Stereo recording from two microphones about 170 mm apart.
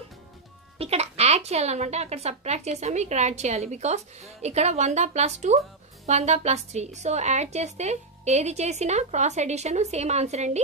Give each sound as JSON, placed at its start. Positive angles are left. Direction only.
{"t": 0.7, "sound": "speech", "side_deg": -35}